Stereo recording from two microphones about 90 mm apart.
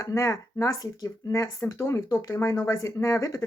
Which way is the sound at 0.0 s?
35° left (ahead or behind).